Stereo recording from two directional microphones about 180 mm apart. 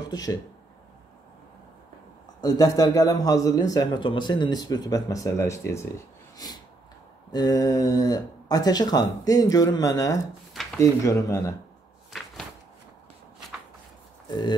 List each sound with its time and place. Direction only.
0.1 s speech: 20° left (ahead or behind)
2.4 s speech: 20° left (ahead or behind)
6.3 s snort: 20° left (ahead or behind)
7.3 s speech: 20° left (ahead or behind)